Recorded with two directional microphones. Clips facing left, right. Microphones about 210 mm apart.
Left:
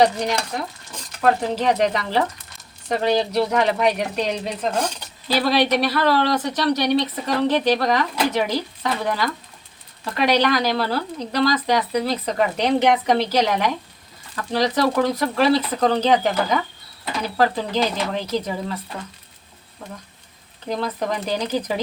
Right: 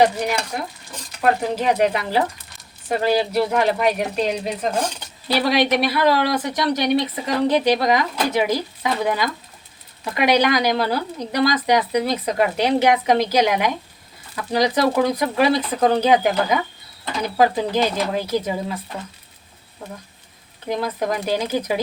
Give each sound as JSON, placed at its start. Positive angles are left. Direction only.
{"t": 0.0, "sound": "speech", "side_deg": -5}
{"t": 20.7, "sound": "speech", "side_deg": -10}